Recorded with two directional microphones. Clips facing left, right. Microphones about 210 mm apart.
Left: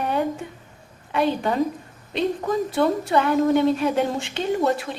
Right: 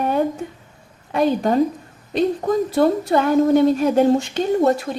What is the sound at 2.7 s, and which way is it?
A woman's voice, 40° right (ahead or behind).